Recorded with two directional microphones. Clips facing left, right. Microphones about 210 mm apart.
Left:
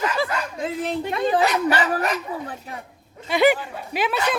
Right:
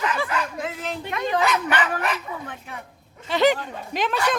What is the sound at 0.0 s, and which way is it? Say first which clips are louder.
Dog: left 1 dB; 35° left (ahead or behind).